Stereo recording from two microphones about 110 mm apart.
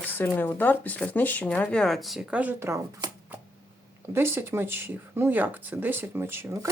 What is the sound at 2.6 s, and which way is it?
Speech, 25° right (ahead or behind).